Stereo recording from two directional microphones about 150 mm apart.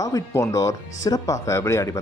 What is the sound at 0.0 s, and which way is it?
Speech, 25° left (ahead or behind).